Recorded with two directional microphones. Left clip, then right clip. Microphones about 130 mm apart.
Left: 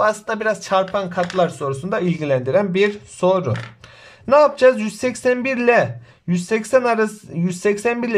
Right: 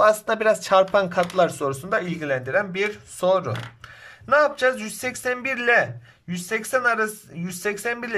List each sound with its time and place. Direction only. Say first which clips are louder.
0.0 s speech: right 1 dB; centre (ahead or behind)
2.0 s a man's voice: left 7 dB; 20° left (ahead or behind)
3.2 s speech: left 3 dB; 15° left (ahead or behind)
4.3 s speech: left 6 dB; 35° left (ahead or behind)